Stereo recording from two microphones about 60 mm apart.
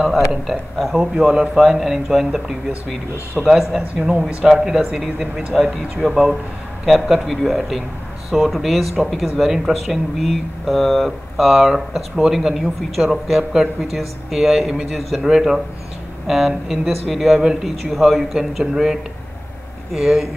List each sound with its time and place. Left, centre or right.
0.5 s speech: centre
3.8 s speech: right
4.4 s speech: centre
7.2 s speech: centre